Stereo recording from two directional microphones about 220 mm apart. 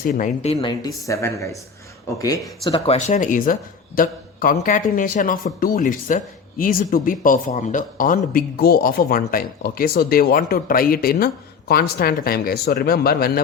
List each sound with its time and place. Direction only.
0.0 s a man's voice: 35° left (ahead or behind)